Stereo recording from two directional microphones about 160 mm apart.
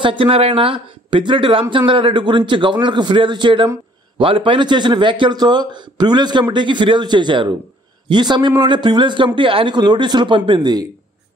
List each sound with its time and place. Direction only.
0.0 s speech: 30° right (ahead or behind)